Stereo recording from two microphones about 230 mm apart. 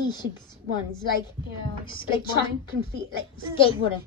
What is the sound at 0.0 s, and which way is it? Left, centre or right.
Speech, centre.